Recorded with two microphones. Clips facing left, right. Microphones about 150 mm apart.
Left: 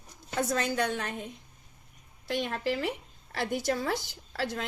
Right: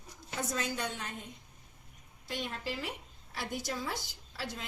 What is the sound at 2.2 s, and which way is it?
A woman's voice, 75° left (ahead or behind).